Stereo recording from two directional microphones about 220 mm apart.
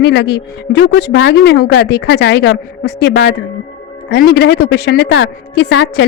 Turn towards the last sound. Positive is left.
turn(degrees=55)  # may be behind; listen again after turning